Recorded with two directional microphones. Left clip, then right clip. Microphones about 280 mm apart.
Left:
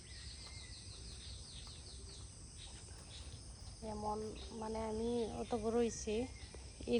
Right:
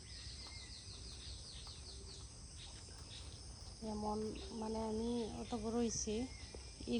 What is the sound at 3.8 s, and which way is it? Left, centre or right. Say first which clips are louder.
Speech: even; centre.